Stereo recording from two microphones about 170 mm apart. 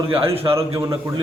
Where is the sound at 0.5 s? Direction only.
20° right (ahead or behind).